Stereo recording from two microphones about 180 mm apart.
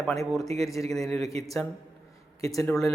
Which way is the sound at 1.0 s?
35° right (ahead or behind).